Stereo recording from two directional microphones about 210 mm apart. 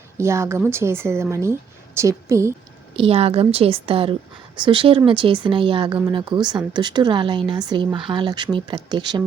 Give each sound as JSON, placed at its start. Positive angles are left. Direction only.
{"t": 0.2, "sound": "a woman's voice", "side_deg": -15}
{"t": 3.0, "sound": "speech", "side_deg": -30}